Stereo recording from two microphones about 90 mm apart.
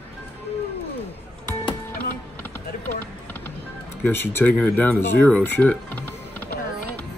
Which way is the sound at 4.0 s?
25° left (ahead or behind).